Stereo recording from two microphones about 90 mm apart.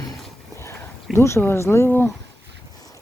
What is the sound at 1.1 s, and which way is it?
Speech, 30° left (ahead or behind).